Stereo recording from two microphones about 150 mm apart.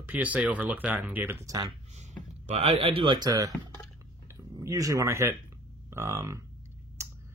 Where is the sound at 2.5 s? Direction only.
45° right (ahead or behind); by 3.5 s 25° right (ahead or behind).